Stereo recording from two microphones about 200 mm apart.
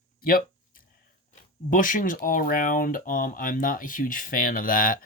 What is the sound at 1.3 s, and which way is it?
Speech, 45° left (ahead or behind).